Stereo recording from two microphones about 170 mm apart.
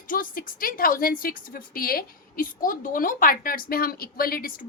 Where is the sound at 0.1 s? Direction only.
55° left (ahead or behind).